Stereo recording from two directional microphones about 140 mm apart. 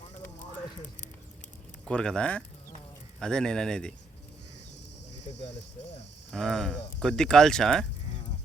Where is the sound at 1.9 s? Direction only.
5° left (ahead or behind).